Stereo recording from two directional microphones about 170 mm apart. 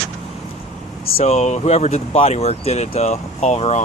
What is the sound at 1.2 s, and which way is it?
Speech, 40° left (ahead or behind).